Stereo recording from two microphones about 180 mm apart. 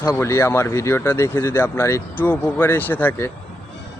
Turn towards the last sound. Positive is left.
turn(degrees=10)  # may be behind; listen again after turning